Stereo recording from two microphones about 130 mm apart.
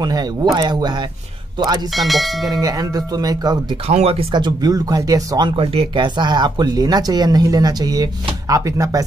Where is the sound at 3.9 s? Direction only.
55° right (ahead or behind).